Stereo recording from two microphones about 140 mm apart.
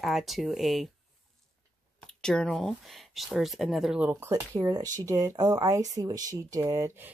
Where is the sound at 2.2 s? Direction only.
5° left (ahead or behind).